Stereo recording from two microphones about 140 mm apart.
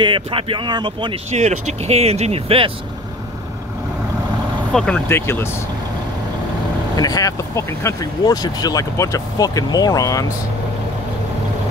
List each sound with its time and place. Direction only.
0.0 s speech: 40° right (ahead or behind)
1.3 s speech: 55° right (ahead or behind)
4.7 s speech: 5° left (ahead or behind)
5.0 s speech: 15° left (ahead or behind)
7.0 s speech: 25° left (ahead or behind)